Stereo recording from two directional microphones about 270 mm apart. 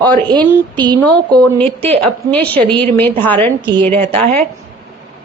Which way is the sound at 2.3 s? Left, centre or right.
Centre.